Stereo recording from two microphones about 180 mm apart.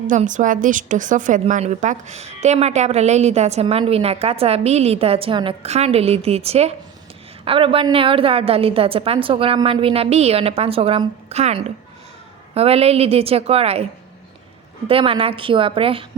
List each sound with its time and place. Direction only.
0.1 s a woman's voice: 45° right (ahead or behind)
14.8 s a woman's voice: 30° right (ahead or behind)